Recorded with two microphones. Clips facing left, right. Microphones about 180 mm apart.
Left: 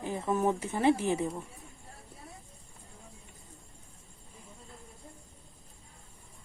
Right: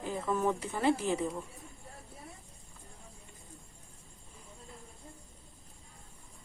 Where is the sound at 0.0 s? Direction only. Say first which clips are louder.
Left 2 dB; 20° left (ahead or behind).